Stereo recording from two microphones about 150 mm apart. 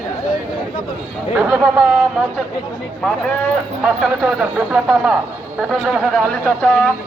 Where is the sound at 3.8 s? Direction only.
5° right (ahead or behind).